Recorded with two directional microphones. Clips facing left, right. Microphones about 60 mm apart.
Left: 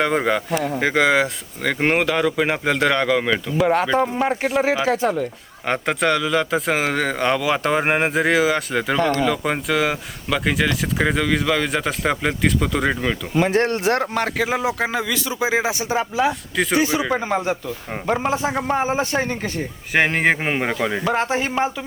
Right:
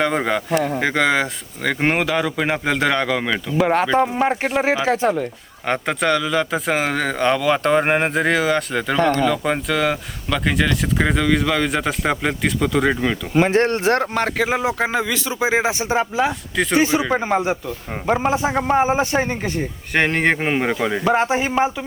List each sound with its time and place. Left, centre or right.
0.0 s speech: centre
3.6 s speech: right
5.6 s speech: centre
13.3 s speech: right
14.6 s speech: right
17.1 s a man's voice: centre
19.9 s speech: centre
21.0 s a man's voice: centre